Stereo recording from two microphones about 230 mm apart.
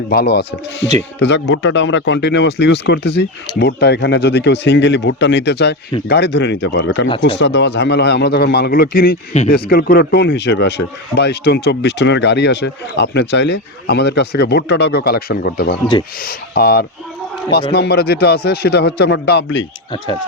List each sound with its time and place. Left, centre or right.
0.1 s speech: left